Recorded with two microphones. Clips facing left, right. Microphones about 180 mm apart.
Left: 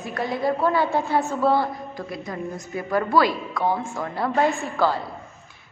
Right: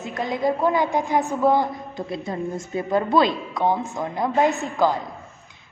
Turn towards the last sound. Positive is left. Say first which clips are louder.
# right 1 dB
turn(degrees=-15)  # may be behind; listen again after turning